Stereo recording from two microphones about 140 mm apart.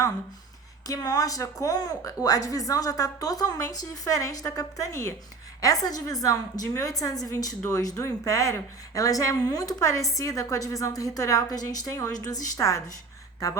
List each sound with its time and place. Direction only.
0.9 s speech: 25° left (ahead or behind)